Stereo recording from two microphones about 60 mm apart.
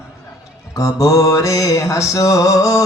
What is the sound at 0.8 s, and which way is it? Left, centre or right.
Mantra, left.